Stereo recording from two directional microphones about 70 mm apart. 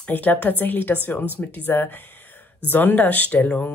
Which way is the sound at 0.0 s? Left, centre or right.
Left.